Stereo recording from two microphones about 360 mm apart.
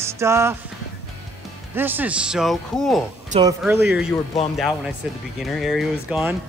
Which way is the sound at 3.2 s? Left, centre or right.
Centre.